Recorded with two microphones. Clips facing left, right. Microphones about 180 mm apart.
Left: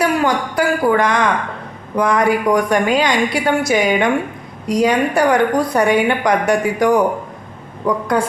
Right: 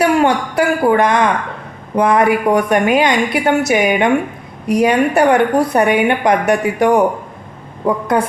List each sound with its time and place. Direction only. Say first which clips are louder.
0.0 s a woman's voice: right 3 dB; 25° right (ahead or behind)
4.6 s a woman's voice: right 2 dB; 60° right (ahead or behind)
4.9 s a woman's voice: right 3 dB; 25° right (ahead or behind)